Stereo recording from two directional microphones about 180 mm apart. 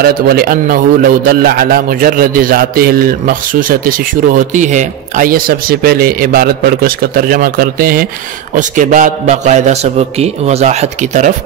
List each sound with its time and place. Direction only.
0.0 s a man's voice: 55° right (ahead or behind)